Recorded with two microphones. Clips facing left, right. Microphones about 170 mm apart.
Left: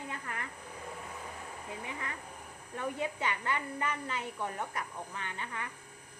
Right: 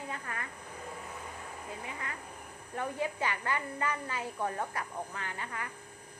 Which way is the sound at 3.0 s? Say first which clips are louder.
Right 1 dB; 25° left (ahead or behind).